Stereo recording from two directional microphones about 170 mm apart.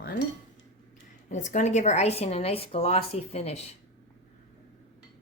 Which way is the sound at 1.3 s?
45° left (ahead or behind).